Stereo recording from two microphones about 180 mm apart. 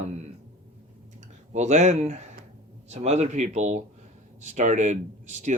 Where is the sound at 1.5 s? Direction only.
40° right (ahead or behind).